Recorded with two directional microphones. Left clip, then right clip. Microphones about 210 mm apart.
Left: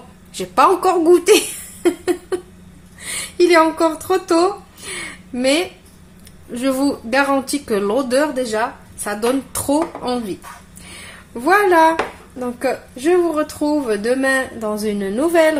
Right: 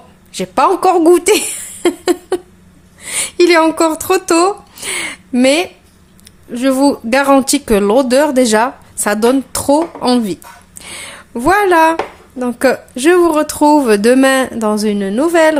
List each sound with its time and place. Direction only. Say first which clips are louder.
0.3 s a woman's voice: right 2 dB; 25° right (ahead or behind)
1.1 s speech: right 1 dB; 40° right (ahead or behind)
6.5 s a woman's voice: right 7 dB; 20° right (ahead or behind); by 9.1 s 45° right (ahead or behind)
9.2 s a woman's voice: right 5 dB; 30° right (ahead or behind)
11.3 s a woman's voice: right 3 dB; 35° right (ahead or behind)